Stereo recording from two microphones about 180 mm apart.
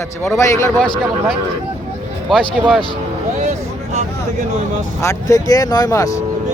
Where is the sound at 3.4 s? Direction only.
40° right (ahead or behind).